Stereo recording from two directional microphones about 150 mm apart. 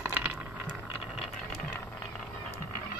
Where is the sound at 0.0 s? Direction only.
10° right (ahead or behind).